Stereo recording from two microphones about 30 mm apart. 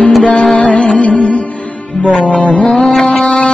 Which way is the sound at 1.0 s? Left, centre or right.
Left.